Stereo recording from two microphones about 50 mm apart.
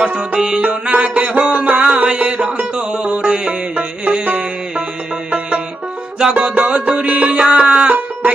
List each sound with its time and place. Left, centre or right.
0.0 s music: right
0.3 s music: centre
0.6 s music: right
6.3 s music: right